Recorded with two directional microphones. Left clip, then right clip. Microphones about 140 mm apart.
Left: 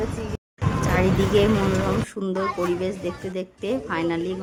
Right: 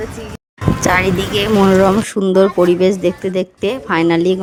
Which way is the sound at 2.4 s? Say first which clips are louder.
Right 13 dB; 55° right (ahead or behind).